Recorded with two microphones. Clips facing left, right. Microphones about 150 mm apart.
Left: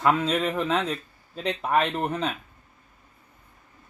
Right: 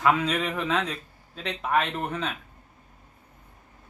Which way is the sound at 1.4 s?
35° left (ahead or behind).